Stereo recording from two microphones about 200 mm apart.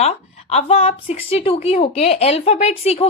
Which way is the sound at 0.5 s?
30° left (ahead or behind).